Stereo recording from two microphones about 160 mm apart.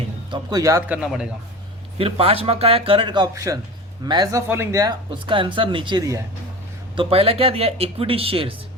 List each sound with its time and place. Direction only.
0.3 s speech: 20° right (ahead or behind)
0.9 s a man's voice: 5° right (ahead or behind)
2.0 s speech: 35° right (ahead or behind); by 6.2 s 20° right (ahead or behind)
6.9 s speech: 35° right (ahead or behind)